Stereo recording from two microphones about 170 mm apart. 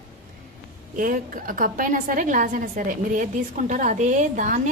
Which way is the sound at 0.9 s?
55° right (ahead or behind).